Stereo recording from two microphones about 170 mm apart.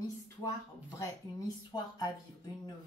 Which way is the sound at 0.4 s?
20° left (ahead or behind).